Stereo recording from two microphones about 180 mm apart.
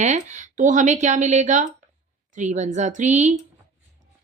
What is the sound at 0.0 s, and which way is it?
A woman's voice, 40° right (ahead or behind).